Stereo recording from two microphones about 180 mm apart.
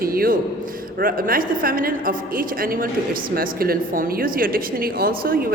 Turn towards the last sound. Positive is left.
turn(degrees=-55)  # may be behind; listen again after turning